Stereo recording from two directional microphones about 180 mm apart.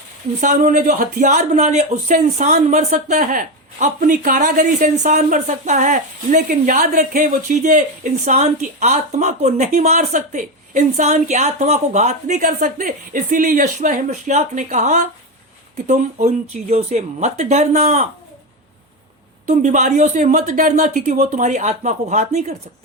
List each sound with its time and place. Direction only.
0.4 s speech: 45° right (ahead or behind)
19.5 s speech: 45° right (ahead or behind)